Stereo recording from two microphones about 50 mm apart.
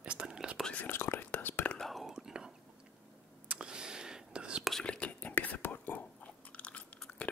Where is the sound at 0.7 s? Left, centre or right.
Left.